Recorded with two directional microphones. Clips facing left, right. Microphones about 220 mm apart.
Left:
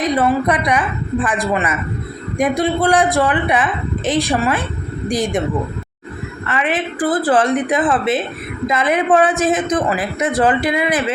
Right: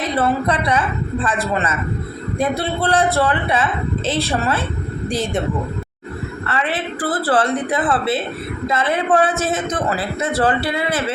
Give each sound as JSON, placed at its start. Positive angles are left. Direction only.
{"t": 0.0, "sound": "a woman's voice", "side_deg": 15}
{"t": 6.5, "sound": "a woman's voice", "side_deg": 15}